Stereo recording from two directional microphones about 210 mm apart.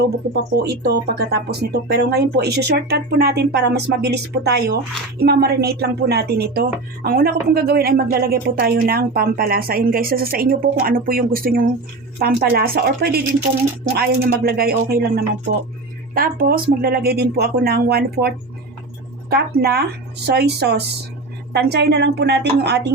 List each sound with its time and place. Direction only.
0.5 s speech: 50° right (ahead or behind)